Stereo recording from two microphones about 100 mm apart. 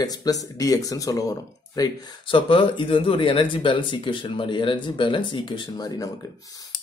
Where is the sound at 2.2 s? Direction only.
60° left (ahead or behind).